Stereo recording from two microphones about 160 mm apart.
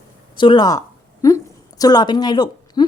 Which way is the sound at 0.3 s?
30° left (ahead or behind).